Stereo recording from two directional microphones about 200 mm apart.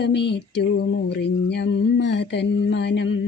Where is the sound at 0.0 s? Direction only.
60° left (ahead or behind).